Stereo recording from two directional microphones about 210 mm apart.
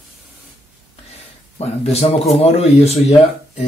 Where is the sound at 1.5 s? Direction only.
30° left (ahead or behind).